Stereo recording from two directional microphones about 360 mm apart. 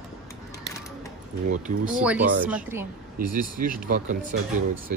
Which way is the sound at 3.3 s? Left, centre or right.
Right.